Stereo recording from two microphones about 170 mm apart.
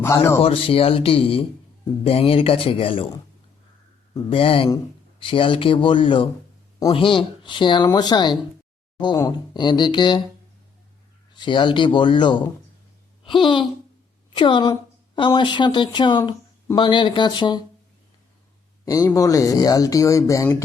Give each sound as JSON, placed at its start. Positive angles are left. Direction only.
{"t": 0.0, "sound": "speech", "side_deg": 15}
{"t": 0.4, "sound": "speech", "side_deg": 35}
{"t": 4.3, "sound": "speech", "side_deg": 35}
{"t": 11.3, "sound": "a woman's voice", "side_deg": 30}
{"t": 18.9, "sound": "speech", "side_deg": 20}